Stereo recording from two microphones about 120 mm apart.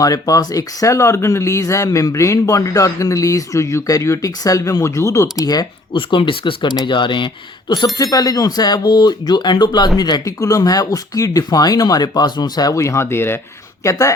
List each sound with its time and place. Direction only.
0.0 s speech: 30° left (ahead or behind)
6.0 s speech: 45° left (ahead or behind)
7.9 s speech: 30° left (ahead or behind)